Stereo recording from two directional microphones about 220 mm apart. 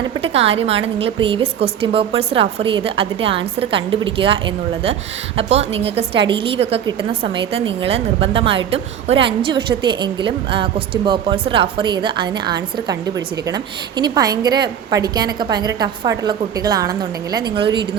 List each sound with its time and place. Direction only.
0.2 s a woman's voice: 25° right (ahead or behind)